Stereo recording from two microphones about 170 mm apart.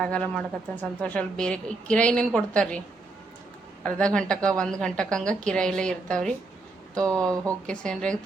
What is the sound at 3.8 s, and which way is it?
A woman's voice, 5° left (ahead or behind).